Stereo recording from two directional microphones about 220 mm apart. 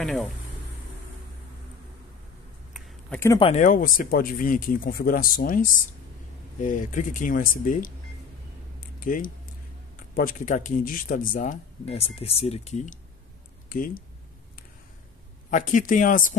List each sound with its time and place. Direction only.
0.0 s speech: centre (ahead or behind)
3.1 s speech: 10° left (ahead or behind)
3.4 s speech: 35° left (ahead or behind)
9.0 s speech: 40° left (ahead or behind)
15.5 s speech: 35° left (ahead or behind)